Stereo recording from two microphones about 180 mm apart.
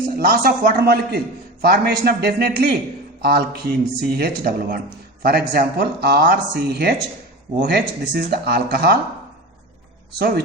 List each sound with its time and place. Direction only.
0.2 s speech: 55° right (ahead or behind)
10.2 s speech: 60° right (ahead or behind)